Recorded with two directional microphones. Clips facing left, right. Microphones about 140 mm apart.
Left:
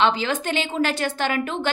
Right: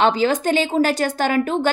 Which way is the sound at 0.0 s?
40° right (ahead or behind).